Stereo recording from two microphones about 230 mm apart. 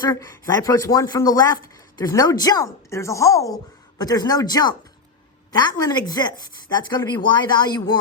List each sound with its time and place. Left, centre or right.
0.0 s speech: centre